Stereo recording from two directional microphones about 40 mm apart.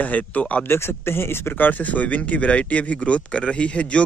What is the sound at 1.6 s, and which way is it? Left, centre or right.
Speech, left.